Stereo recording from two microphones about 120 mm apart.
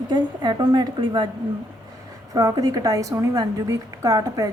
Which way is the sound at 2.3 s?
30° right (ahead or behind).